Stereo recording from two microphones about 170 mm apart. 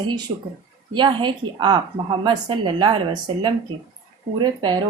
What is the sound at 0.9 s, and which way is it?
A woman's voice, 30° right (ahead or behind).